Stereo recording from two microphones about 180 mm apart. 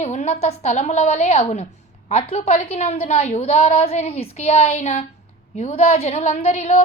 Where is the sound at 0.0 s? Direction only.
40° left (ahead or behind).